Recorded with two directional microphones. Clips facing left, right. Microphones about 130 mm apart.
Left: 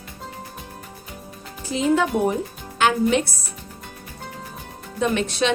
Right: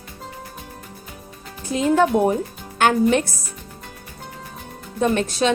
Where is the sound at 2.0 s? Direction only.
45° right (ahead or behind).